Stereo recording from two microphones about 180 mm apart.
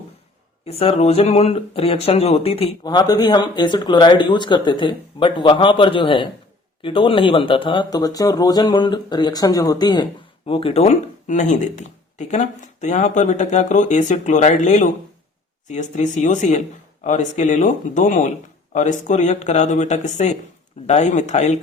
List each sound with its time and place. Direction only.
0.6 s speech: 35° left (ahead or behind)